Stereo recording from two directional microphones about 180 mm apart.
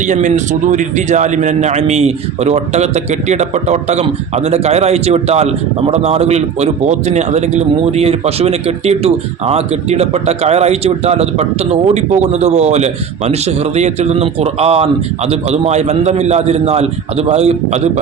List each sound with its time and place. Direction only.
0.0 s a man's voice: 45° right (ahead or behind)